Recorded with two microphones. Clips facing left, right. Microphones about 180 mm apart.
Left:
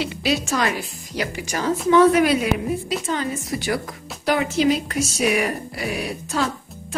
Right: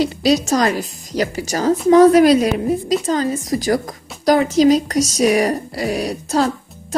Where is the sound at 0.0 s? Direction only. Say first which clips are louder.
Right 7 dB; 40° right (ahead or behind).